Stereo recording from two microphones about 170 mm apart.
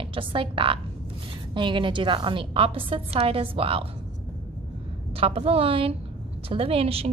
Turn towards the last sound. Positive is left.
turn(degrees=-35)  # may be behind; listen again after turning